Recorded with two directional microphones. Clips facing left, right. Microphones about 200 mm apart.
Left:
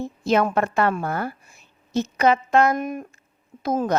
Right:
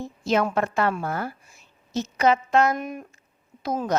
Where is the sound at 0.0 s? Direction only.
55° left (ahead or behind).